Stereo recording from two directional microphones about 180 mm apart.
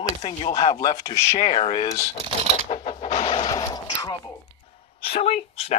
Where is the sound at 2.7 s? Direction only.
35° left (ahead or behind).